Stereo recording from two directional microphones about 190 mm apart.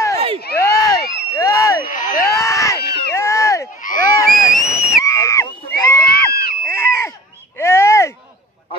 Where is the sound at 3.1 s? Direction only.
15° left (ahead or behind).